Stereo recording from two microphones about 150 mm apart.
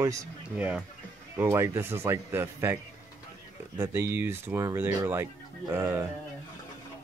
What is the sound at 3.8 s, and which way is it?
Speech, 15° right (ahead or behind).